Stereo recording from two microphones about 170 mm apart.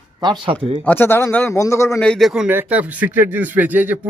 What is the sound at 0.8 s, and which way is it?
A man's voice, 15° left (ahead or behind).